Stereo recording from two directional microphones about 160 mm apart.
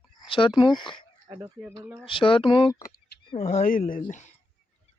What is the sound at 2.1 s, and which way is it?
Speech, 35° left (ahead or behind).